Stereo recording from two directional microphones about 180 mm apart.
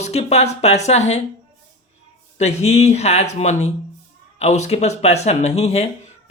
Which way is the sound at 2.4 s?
35° left (ahead or behind).